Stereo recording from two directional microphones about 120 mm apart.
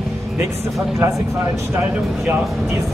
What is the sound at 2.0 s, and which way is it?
Speech, 5° right (ahead or behind).